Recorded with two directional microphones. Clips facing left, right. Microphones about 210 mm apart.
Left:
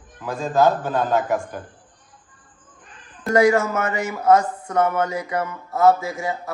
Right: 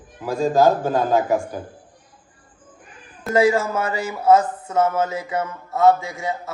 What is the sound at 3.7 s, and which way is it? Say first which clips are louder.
A man's voice: even; 30° right (ahead or behind).